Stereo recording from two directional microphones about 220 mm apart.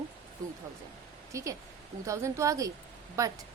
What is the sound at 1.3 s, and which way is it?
A woman's voice, 15° right (ahead or behind).